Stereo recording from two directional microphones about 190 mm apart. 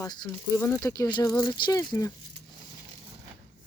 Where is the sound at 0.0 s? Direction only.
20° left (ahead or behind).